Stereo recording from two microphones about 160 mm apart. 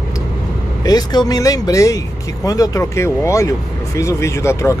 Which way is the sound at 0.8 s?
25° left (ahead or behind).